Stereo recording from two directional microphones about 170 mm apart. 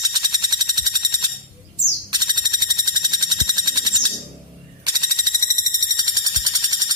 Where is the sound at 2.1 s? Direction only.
25° right (ahead or behind).